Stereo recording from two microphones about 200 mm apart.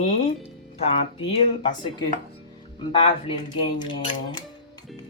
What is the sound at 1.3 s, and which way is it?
Speech, 25° left (ahead or behind).